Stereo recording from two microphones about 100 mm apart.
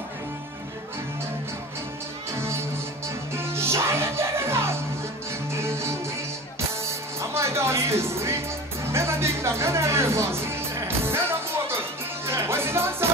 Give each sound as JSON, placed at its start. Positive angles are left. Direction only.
{"t": 2.3, "sound": "music", "side_deg": -25}